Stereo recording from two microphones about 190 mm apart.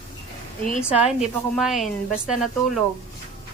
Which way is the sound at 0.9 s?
5° right (ahead or behind).